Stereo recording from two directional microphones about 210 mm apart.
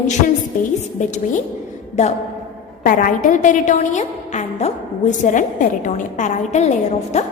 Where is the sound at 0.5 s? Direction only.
40° left (ahead or behind).